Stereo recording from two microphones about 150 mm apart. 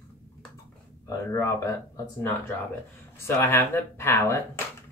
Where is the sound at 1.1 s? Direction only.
20° left (ahead or behind).